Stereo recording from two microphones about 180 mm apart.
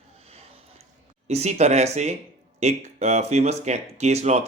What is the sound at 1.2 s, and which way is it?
Speech, 40° right (ahead or behind).